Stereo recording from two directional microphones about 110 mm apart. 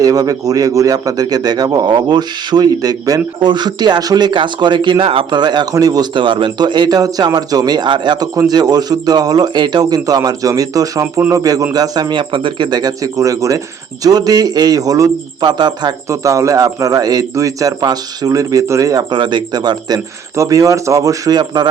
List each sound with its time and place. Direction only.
0.0 s a man's voice: 35° right (ahead or behind)
16.0 s a man's voice: 30° right (ahead or behind)
19.1 s a man's voice: 45° right (ahead or behind)
20.3 s a man's voice: 30° right (ahead or behind)